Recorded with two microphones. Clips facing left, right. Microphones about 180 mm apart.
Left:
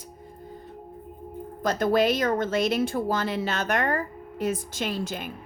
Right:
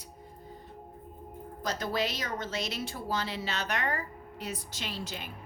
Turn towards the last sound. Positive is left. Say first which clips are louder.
# left 9 dB
turn(degrees=50)  # may be behind; listen again after turning